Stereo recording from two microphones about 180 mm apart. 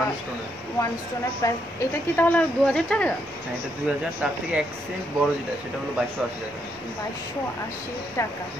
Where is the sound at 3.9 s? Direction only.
10° right (ahead or behind).